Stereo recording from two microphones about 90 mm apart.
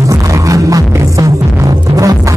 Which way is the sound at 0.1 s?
40° right (ahead or behind).